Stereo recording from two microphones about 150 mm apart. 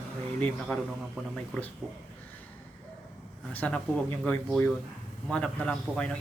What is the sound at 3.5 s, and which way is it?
Speech, 10° left (ahead or behind).